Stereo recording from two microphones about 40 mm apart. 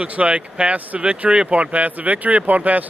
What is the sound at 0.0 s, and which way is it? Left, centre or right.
Speech, right.